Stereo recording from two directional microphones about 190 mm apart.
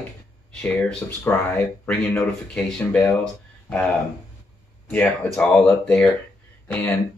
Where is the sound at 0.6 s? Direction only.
5° left (ahead or behind).